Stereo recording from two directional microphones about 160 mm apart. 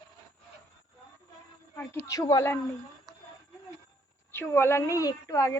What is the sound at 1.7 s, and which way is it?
Speech, 15° left (ahead or behind).